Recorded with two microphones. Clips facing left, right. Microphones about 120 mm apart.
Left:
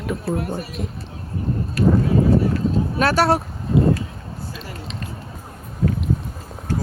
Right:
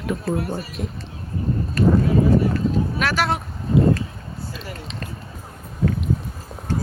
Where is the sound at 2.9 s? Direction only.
35° left (ahead or behind).